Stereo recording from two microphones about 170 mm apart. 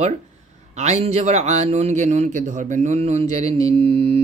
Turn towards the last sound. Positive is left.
turn(degrees=-35)  # may be behind; listen again after turning